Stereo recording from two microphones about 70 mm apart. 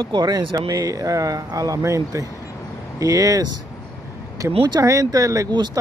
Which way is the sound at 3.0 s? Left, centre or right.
Right.